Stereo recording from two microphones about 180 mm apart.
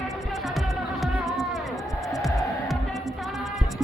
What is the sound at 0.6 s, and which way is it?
Music, centre (ahead or behind).